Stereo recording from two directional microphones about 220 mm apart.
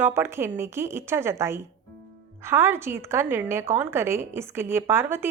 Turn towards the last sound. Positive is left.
turn(degrees=-10)  # may be behind; listen again after turning